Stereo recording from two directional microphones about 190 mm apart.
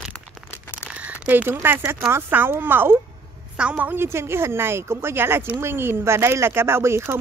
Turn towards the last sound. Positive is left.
turn(degrees=-15)  # may be behind; listen again after turning